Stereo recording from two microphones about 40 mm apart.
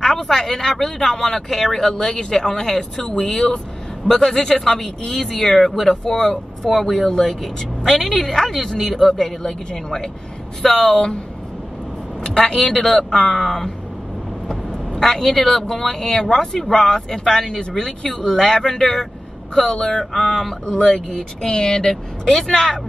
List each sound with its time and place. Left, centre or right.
0.0 s speech: centre
4.1 s speech: centre
12.2 s speech: centre
15.0 s speech: centre
20.0 s speech: centre
20.6 s speech: centre